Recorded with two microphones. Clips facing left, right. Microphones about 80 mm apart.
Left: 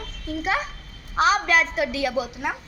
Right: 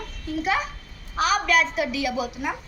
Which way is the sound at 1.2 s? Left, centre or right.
Left.